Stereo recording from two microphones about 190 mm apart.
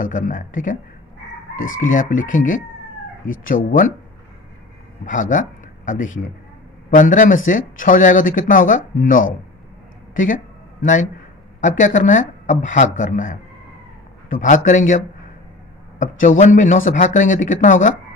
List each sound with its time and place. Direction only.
0.0 s speech: 45° left (ahead or behind)
5.0 s a man's voice: 45° left (ahead or behind)
10.1 s a sound: 45° left (ahead or behind)
11.6 s speech: 40° left (ahead or behind)
16.0 s speech: 40° left (ahead or behind)